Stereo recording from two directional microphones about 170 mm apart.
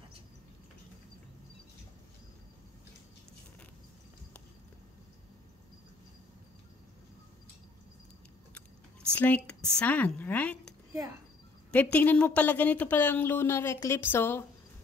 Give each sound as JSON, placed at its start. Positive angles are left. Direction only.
{"t": 9.1, "sound": "speech", "side_deg": 10}
{"t": 10.9, "sound": "a sound", "side_deg": -15}
{"t": 11.7, "sound": "speech", "side_deg": 10}